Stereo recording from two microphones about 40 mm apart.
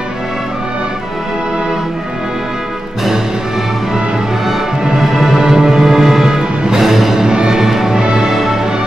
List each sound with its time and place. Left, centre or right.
4.5 s music: centre
8.0 s music: right
8.3 s music: centre